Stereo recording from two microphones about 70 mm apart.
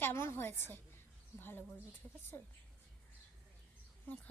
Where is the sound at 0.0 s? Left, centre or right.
Left.